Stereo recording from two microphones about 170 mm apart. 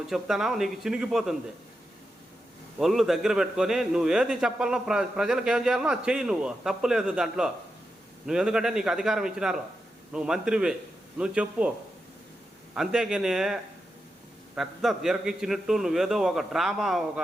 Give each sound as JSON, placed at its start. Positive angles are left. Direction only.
{"t": 0.1, "sound": "a man's voice", "side_deg": 0}
{"t": 2.7, "sound": "a man's voice", "side_deg": 0}
{"t": 12.7, "sound": "a man's voice", "side_deg": -5}